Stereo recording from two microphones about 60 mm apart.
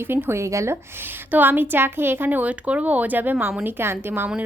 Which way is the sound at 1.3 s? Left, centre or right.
Right.